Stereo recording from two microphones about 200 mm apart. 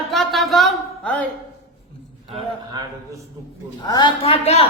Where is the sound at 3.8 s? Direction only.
25° left (ahead or behind).